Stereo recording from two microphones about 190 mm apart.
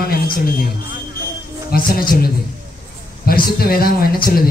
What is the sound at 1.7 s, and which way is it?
Speech, 50° left (ahead or behind).